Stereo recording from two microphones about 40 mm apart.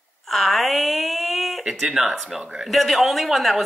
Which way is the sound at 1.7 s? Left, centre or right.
Centre.